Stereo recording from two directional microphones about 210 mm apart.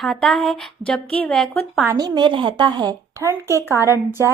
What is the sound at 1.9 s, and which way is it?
A woman's voice, 20° right (ahead or behind).